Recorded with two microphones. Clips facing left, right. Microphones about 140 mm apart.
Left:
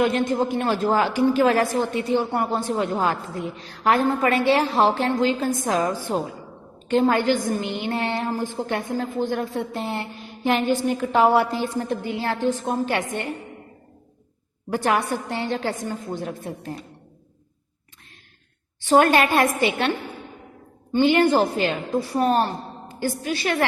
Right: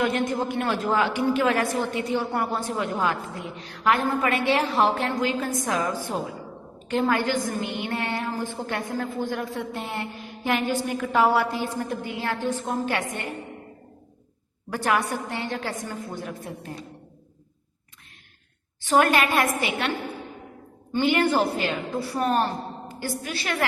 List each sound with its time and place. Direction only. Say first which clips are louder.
0.0 s speech: left 4 dB; 25° left (ahead or behind)
6.9 s a woman's voice: left 4 dB; 25° left (ahead or behind)
14.7 s a woman's voice: left 3 dB; 30° left (ahead or behind)
18.9 s speech: left 4 dB; 30° left (ahead or behind)
20.9 s a woman's voice: left 4 dB; 25° left (ahead or behind)